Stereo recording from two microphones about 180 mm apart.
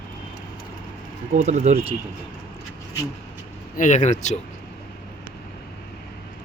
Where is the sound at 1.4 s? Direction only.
40° right (ahead or behind).